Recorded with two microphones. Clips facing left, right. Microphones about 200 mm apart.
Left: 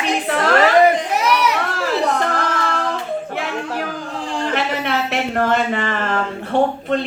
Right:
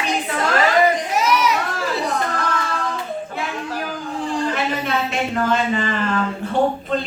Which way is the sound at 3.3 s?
65° left (ahead or behind).